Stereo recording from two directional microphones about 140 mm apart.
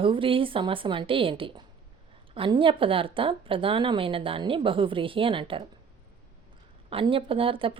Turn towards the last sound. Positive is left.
turn(degrees=-40)  # may be behind; listen again after turning